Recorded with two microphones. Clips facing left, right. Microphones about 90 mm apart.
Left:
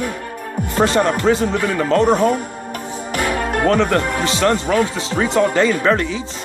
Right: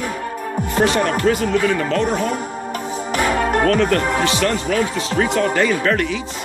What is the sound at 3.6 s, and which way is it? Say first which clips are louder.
Speech: left 4 dB; 25° left (ahead or behind).